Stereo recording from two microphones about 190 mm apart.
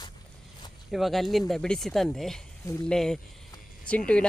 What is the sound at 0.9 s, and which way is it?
Speech, centre (ahead or behind).